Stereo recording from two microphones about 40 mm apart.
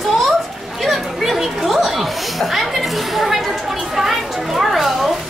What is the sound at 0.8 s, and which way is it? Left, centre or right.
Speech, centre.